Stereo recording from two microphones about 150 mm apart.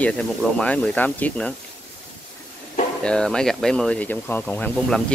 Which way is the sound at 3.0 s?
5° left (ahead or behind).